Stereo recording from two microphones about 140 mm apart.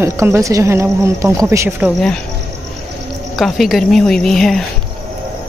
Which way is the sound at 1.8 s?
5° left (ahead or behind).